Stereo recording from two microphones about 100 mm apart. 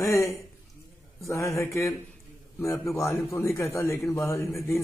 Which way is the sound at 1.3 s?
30° left (ahead or behind).